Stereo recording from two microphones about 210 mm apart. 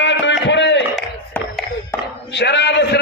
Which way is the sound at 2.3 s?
55° left (ahead or behind).